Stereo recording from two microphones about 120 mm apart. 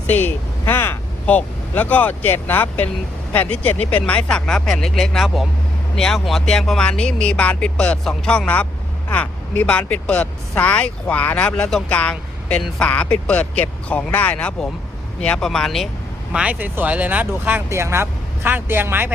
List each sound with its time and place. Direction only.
0.1 s speech: 15° left (ahead or behind)
16.3 s speech: 10° right (ahead or behind)